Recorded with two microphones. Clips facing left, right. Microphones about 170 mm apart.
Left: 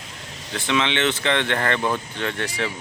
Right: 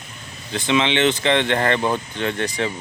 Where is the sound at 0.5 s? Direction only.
15° right (ahead or behind).